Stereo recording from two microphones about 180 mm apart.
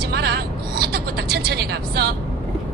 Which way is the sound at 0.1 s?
65° right (ahead or behind).